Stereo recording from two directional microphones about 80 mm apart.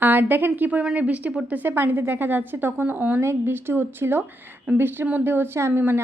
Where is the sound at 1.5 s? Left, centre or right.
Right.